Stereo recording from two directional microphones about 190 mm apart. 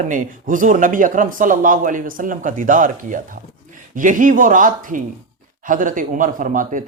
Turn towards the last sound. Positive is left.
turn(degrees=-45)  # may be behind; listen again after turning